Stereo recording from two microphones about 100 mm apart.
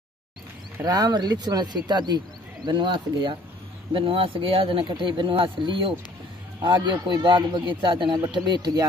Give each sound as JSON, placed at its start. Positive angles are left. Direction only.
{"t": 0.8, "sound": "a man's voice", "side_deg": -40}
{"t": 3.9, "sound": "a man's voice", "side_deg": -60}
{"t": 8.3, "sound": "a man's voice", "side_deg": -45}